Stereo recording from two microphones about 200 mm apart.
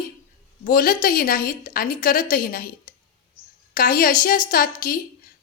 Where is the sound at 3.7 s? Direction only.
45° left (ahead or behind).